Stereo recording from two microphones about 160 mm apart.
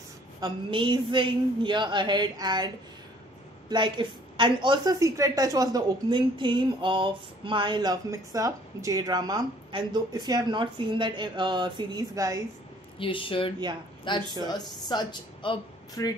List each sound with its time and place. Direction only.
0.4 s a woman's voice: 30° right (ahead or behind)
13.0 s speech: 35° left (ahead or behind)